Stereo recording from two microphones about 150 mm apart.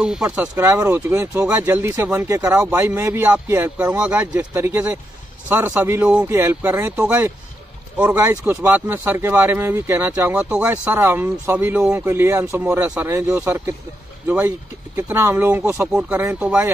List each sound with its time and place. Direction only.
0.0 s speech: 5° right (ahead or behind)